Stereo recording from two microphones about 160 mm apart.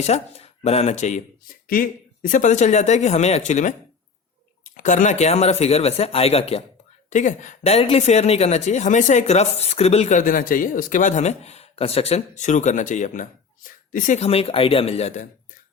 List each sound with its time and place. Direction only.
0.0 s speech: 40° left (ahead or behind)
1.6 s speech: 60° left (ahead or behind); by 6.6 s 40° left (ahead or behind)
7.1 s speech: 50° left (ahead or behind)
14.2 s speech: 40° left (ahead or behind)